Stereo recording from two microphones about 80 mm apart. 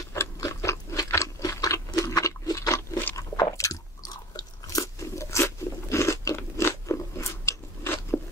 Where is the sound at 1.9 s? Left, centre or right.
Left.